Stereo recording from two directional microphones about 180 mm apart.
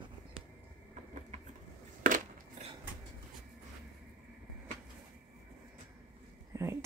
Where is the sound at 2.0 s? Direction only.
45° right (ahead or behind).